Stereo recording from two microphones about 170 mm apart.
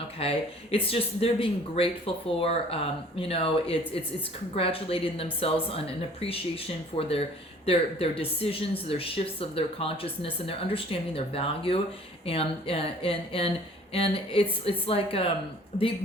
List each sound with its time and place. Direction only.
0.2 s speech: 35° left (ahead or behind)